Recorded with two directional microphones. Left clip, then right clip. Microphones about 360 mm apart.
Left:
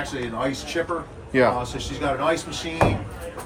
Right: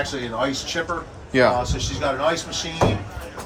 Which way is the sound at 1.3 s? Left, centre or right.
Centre.